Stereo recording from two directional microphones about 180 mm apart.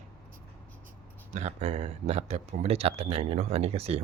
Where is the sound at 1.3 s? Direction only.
40° right (ahead or behind).